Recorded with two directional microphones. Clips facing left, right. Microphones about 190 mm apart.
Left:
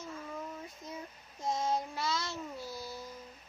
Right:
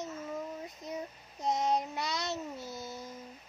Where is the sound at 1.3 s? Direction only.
20° right (ahead or behind).